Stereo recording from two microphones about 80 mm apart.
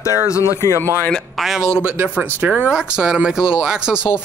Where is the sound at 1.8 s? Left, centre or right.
Right.